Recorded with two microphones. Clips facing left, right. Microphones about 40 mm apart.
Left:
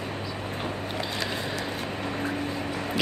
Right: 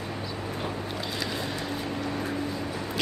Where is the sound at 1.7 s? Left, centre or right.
Left.